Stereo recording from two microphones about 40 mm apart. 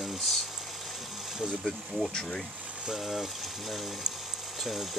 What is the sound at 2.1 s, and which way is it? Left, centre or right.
Speech, centre.